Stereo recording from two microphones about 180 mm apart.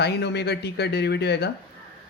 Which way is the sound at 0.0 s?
70° left (ahead or behind).